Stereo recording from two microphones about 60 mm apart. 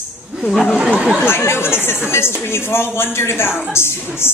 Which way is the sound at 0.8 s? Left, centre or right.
Right.